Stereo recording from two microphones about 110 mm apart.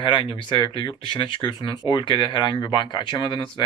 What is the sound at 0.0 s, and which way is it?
Speech, 50° left (ahead or behind).